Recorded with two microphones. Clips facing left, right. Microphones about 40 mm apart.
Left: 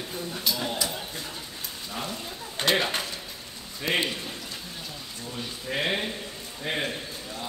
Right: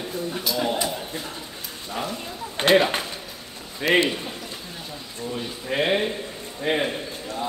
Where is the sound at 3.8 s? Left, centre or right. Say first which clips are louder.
Right 7 dB; right.